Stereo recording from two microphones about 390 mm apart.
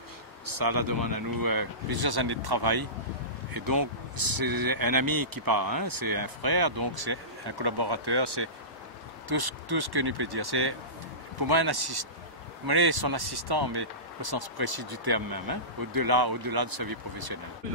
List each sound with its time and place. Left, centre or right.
0.5 s speech: right
9.3 s speech: right